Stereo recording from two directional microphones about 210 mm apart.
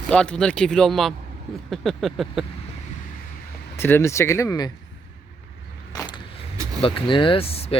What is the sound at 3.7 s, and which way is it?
Speech, 10° left (ahead or behind).